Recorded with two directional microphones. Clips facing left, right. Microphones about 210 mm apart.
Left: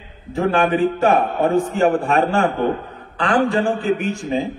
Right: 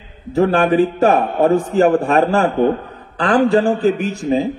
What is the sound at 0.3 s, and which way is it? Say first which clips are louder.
A man's voice: right 4 dB; 40° right (ahead or behind).